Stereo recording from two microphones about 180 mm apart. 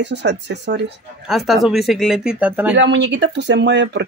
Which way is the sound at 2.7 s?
80° right.